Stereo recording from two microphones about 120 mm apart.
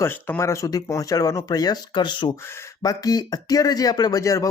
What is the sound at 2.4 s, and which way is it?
Speech, 20° left (ahead or behind).